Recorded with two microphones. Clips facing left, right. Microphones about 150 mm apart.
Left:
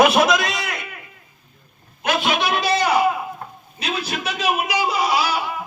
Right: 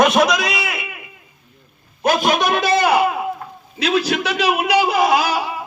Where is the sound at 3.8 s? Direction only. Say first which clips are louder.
Right 8 dB; 85° right; by 5.5 s 45° right (ahead or behind).